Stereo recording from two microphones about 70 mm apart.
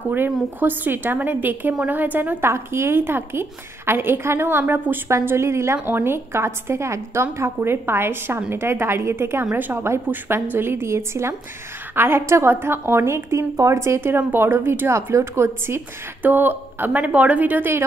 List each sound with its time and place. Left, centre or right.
0.6 s a woman's voice: right
5.1 s a woman's voice: right
16.2 s a woman's voice: right